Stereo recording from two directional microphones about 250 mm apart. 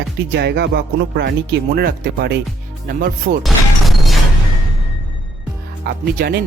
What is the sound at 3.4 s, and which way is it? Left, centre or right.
Music, centre.